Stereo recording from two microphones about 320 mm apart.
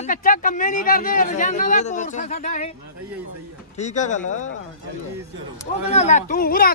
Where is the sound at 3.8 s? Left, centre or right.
Left.